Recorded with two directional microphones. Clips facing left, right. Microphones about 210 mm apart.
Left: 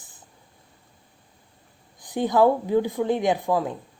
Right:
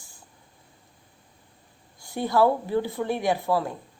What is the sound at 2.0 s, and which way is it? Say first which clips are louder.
A woman's voice: left 2 dB; 15° left (ahead or behind).